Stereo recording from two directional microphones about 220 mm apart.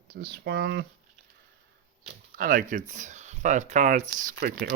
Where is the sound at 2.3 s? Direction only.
40° right (ahead or behind).